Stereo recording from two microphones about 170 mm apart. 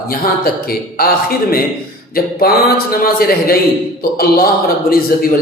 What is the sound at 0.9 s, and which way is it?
Speech, 60° left (ahead or behind).